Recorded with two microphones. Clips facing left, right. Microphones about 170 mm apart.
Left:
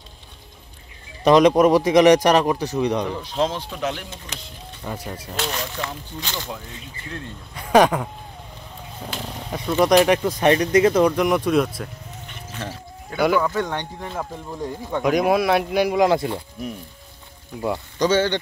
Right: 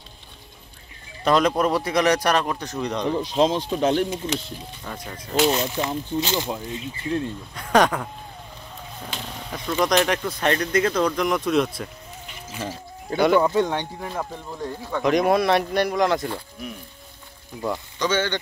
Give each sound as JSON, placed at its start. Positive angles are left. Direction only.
{"t": 1.2, "sound": "speech", "side_deg": 15}
{"t": 3.2, "sound": "speech", "side_deg": -15}
{"t": 3.7, "sound": "speech", "side_deg": -35}
{"t": 4.8, "sound": "speech", "side_deg": 10}
{"t": 5.5, "sound": "speech", "side_deg": -20}
{"t": 7.5, "sound": "speech", "side_deg": 5}
{"t": 13.4, "sound": "speech", "side_deg": -20}
{"t": 16.1, "sound": "speech", "side_deg": 25}
{"t": 17.9, "sound": "speech", "side_deg": 40}